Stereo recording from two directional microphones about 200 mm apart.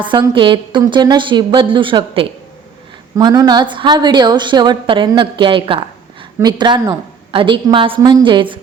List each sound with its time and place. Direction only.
0.0 s a woman's voice: 25° right (ahead or behind)